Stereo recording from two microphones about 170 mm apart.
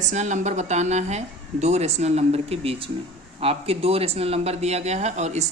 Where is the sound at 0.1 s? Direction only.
45° right (ahead or behind).